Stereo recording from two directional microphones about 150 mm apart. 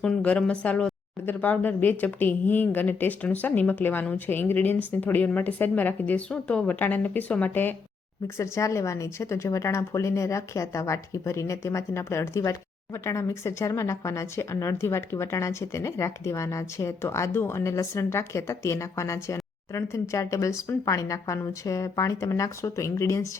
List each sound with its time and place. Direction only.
0.0 s speech: 5° left (ahead or behind)